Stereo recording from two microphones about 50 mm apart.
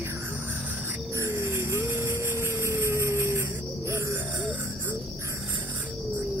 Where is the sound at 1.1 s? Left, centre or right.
Right.